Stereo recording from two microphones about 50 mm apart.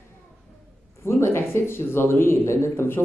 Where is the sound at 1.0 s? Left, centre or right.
Left.